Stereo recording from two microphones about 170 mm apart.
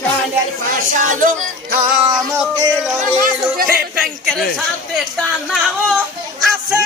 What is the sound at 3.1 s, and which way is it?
Speech, 55° right (ahead or behind).